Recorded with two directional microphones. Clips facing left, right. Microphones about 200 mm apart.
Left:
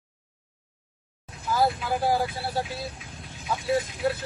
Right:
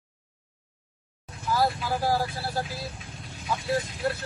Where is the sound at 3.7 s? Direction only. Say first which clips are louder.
Left 3 dB; centre (ahead or behind).